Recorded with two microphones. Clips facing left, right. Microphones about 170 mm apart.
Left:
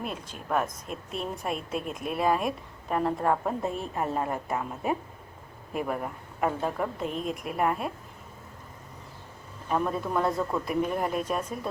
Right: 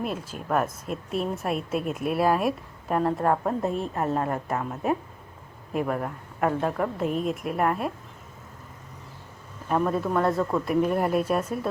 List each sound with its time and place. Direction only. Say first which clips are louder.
0.0 s a woman's voice: right 5 dB; centre (ahead or behind)
9.6 s a woman's voice: right 4 dB; centre (ahead or behind)